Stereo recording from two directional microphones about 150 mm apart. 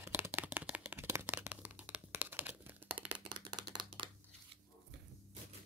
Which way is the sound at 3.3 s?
30° right (ahead or behind).